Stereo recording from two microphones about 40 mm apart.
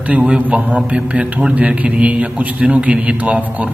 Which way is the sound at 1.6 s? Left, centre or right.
Right.